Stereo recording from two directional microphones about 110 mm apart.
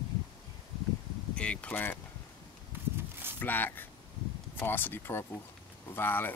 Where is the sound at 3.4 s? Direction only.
15° left (ahead or behind).